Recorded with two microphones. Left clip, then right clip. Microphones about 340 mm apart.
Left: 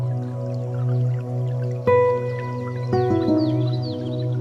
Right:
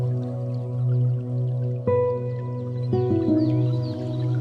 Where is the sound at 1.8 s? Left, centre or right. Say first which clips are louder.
Left 5 dB; left.